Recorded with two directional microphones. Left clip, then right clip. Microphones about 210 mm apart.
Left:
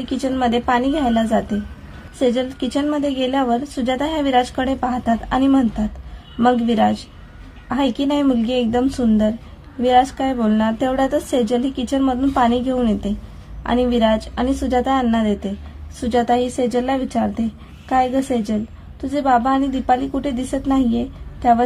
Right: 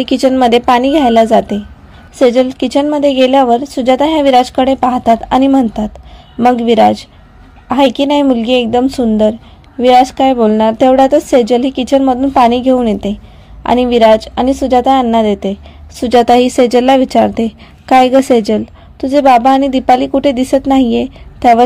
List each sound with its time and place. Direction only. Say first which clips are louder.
0.0 s a woman's voice: right 11 dB; 35° right (ahead or behind)